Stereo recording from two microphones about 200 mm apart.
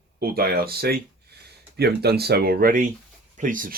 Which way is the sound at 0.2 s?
50° right (ahead or behind).